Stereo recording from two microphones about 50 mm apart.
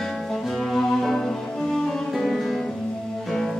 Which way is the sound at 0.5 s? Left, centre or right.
Centre.